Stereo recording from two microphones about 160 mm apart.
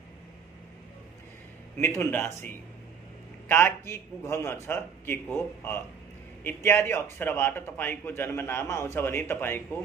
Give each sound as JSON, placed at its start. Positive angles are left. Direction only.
{"t": 1.8, "sound": "speech", "side_deg": 15}